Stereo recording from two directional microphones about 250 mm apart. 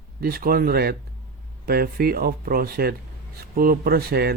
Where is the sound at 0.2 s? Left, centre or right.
Right.